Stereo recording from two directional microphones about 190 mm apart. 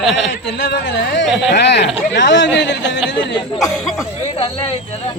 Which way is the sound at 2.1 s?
70° left (ahead or behind).